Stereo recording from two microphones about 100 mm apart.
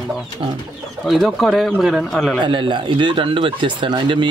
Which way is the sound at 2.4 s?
55° right (ahead or behind).